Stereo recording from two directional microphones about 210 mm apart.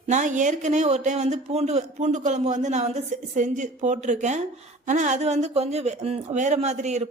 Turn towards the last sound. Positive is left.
turn(degrees=-35)  # may be behind; listen again after turning